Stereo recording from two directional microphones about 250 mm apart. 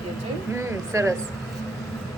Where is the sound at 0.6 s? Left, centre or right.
Centre.